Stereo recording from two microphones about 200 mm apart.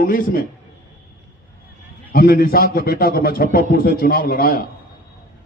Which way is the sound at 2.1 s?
45° left (ahead or behind).